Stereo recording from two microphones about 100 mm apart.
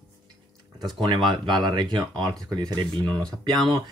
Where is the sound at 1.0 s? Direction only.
50° right (ahead or behind).